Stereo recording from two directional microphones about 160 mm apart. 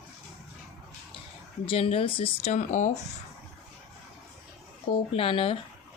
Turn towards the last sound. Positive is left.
turn(degrees=35)  # may be behind; listen again after turning